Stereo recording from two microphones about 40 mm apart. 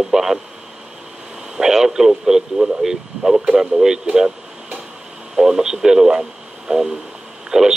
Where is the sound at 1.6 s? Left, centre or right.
Centre.